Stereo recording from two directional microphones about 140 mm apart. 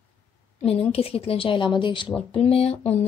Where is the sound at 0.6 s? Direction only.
45° left (ahead or behind).